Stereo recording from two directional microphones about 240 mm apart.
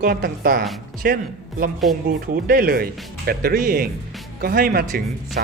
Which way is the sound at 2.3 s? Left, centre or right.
Right.